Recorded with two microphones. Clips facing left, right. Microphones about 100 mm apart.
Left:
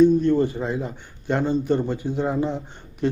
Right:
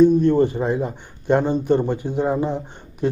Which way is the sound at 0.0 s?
15° right (ahead or behind).